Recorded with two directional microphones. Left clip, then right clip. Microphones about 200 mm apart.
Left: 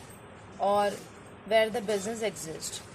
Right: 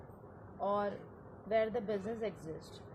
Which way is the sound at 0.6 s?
20° left (ahead or behind).